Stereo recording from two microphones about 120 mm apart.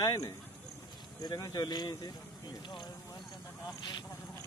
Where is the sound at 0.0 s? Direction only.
30° left (ahead or behind).